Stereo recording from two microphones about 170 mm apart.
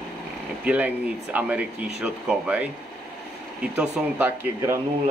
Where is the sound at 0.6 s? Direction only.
10° right (ahead or behind).